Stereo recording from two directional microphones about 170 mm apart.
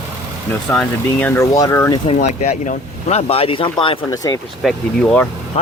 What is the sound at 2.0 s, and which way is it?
Speech, 40° left (ahead or behind).